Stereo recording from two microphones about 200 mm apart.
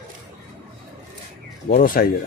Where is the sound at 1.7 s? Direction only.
45° left (ahead or behind).